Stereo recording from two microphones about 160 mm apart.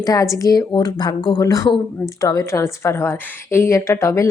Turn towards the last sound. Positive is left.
turn(degrees=20)  # may be behind; listen again after turning